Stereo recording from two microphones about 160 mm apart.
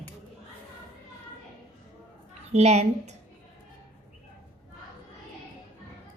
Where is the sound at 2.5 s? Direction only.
45° right (ahead or behind).